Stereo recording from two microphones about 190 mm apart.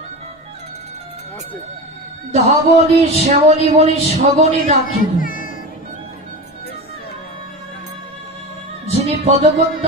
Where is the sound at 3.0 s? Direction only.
35° right (ahead or behind).